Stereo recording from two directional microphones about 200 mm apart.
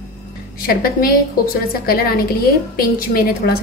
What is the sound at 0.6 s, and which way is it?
A woman's voice, 45° left (ahead or behind).